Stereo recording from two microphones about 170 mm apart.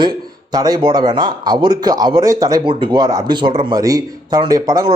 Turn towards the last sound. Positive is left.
turn(degrees=-20)  # may be behind; listen again after turning